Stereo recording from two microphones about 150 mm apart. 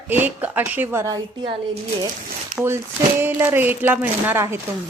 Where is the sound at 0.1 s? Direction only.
15° right (ahead or behind).